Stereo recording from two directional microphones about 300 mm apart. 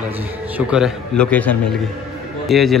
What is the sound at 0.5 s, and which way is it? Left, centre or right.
A man's voice, centre.